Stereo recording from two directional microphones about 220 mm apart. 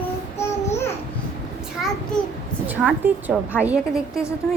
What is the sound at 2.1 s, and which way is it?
Speech, 5° left (ahead or behind).